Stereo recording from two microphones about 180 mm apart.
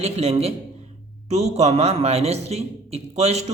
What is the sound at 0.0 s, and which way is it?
A man's voice, 35° right (ahead or behind).